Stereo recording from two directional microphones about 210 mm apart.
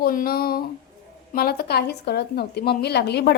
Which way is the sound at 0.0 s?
45° left (ahead or behind).